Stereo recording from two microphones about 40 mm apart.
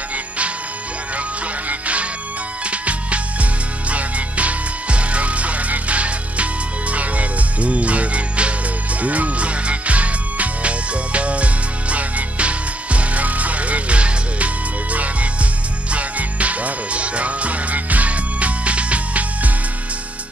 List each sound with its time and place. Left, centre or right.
1.7 s music: right